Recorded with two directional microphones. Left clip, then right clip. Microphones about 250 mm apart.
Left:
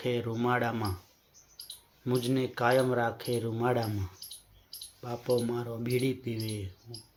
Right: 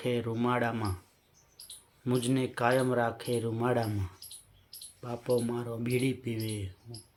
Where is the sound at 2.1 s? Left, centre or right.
Centre.